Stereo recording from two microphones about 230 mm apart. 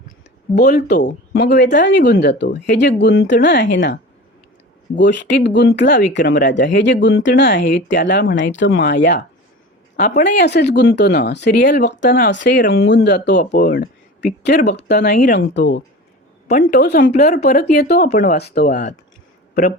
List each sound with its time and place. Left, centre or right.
0.5 s speech: left
16.5 s speech: left